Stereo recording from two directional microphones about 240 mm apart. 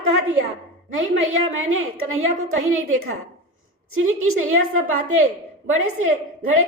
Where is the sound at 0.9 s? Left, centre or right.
Right.